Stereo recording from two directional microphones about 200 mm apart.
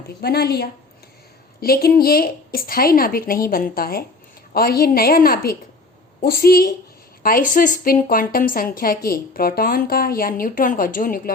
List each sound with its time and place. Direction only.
0.2 s a woman's voice: 50° left (ahead or behind)